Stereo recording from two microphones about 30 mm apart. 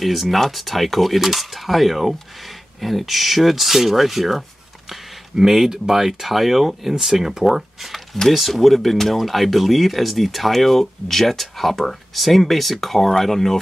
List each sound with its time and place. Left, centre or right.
0.0 s speech: centre
5.3 s speech: right; by 13.6 s centre